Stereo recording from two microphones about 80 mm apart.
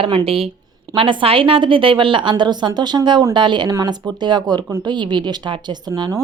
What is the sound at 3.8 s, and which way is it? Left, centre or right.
A woman's voice, right.